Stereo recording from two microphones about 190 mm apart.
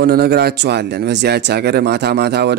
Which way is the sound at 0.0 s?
55° right (ahead or behind).